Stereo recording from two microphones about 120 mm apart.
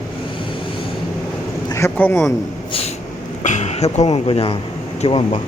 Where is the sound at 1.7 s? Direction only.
25° left (ahead or behind).